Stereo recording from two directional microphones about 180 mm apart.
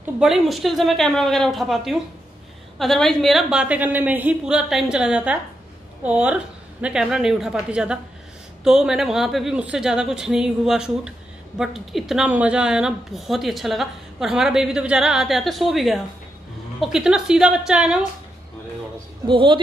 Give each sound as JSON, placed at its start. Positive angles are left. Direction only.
{"t": 0.0, "sound": "speech", "side_deg": 0}
{"t": 19.2, "sound": "speech", "side_deg": -25}